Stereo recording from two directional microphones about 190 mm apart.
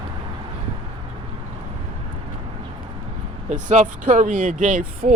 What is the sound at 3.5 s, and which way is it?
Speech, 40° right (ahead or behind).